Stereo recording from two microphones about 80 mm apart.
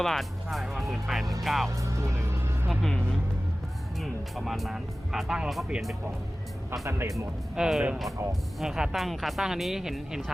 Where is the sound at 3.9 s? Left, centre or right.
Centre.